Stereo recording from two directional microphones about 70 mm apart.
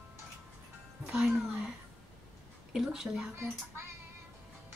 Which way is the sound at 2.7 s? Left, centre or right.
Centre.